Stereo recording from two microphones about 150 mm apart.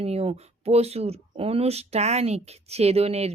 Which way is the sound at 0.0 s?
40° right (ahead or behind).